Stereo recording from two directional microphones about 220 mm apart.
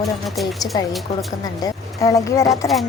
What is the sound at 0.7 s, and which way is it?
A woman's voice, 20° left (ahead or behind).